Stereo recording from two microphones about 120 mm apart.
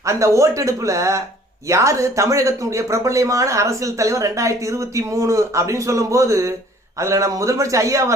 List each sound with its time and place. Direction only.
0.0 s speech: 25° right (ahead or behind)